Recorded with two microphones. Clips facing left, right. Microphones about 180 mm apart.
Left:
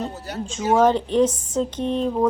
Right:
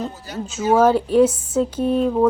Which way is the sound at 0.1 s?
65° left (ahead or behind).